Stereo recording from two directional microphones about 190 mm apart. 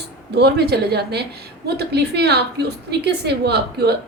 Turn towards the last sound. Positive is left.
turn(degrees=-60)  # may be behind; listen again after turning